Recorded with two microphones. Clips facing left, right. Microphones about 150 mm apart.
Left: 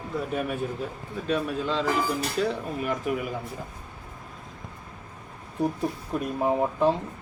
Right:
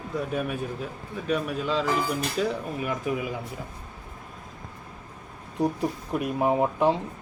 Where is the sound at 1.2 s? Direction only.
10° right (ahead or behind).